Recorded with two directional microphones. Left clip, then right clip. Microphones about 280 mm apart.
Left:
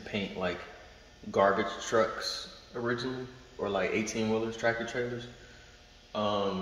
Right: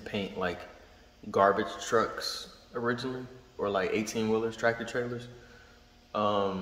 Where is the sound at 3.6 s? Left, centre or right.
Centre.